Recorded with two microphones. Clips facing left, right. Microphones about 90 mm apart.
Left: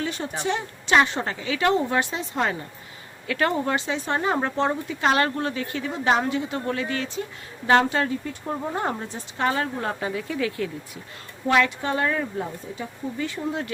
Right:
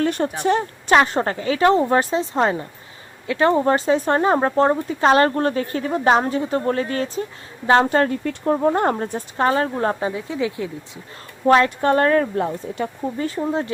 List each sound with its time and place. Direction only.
0.0 s a sound: 55° right (ahead or behind)
0.4 s speech: 45° right (ahead or behind)
8.2 s a woman's voice: 70° right (ahead or behind); by 9.5 s 50° right (ahead or behind)
9.5 s speech: 35° right (ahead or behind)
10.1 s speech: 20° right (ahead or behind)
11.4 s a woman's voice: 40° right (ahead or behind); by 12.9 s 65° right (ahead or behind)
13.1 s speech: 40° right (ahead or behind)